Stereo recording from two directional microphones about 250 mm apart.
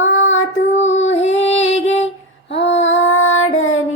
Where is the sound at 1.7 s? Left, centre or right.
Left.